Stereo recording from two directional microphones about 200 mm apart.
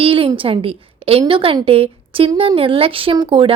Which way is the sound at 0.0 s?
25° right (ahead or behind).